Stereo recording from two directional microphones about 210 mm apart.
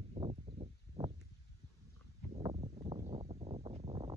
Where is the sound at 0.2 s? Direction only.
25° right (ahead or behind).